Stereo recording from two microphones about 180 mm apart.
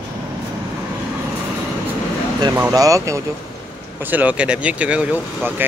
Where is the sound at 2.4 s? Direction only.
20° right (ahead or behind).